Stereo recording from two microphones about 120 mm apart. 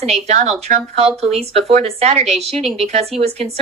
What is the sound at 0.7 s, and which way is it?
Speech, 90° right.